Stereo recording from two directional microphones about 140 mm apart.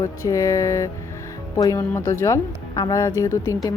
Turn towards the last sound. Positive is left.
turn(degrees=20)  # may be behind; listen again after turning